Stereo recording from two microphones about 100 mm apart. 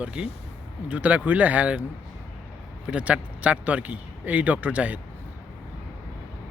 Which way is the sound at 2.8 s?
10° right (ahead or behind).